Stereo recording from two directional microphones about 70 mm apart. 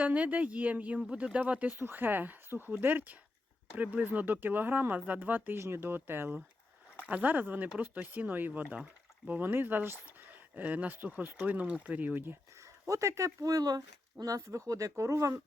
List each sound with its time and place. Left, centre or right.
0.0 s speech: right
5.5 s speech: right
7.0 s speech: right
12.8 s speech: right